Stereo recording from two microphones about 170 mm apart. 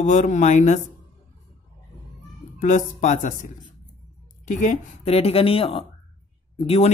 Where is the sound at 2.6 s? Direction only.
45° left (ahead or behind).